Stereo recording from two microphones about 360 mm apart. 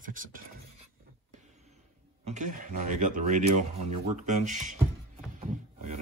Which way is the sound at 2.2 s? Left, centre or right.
Centre.